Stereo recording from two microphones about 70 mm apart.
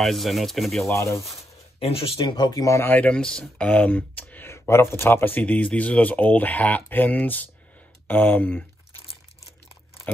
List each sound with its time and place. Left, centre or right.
0.0 s speech: centre
0.8 s speech: left
2.1 s speech: left
2.8 s speech: left
3.1 s speech: centre
4.5 s speech: left